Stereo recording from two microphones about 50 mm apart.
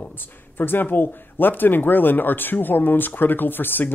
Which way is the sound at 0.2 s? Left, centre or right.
Left.